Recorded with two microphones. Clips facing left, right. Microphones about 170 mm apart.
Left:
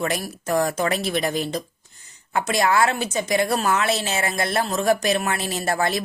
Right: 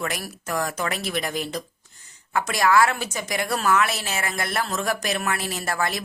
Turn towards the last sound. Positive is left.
turn(degrees=25)  # may be behind; listen again after turning